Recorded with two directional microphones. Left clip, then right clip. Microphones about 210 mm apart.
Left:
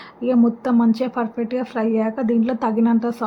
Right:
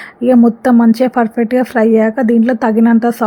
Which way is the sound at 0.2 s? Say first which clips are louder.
Right 9 dB; 35° right (ahead or behind).